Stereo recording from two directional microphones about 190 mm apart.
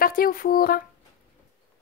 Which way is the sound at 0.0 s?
50° left (ahead or behind).